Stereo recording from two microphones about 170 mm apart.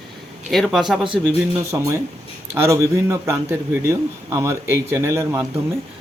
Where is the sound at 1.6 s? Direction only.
15° right (ahead or behind).